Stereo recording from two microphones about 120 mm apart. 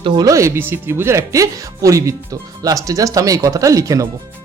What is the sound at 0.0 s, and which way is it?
Speech, 30° right (ahead or behind).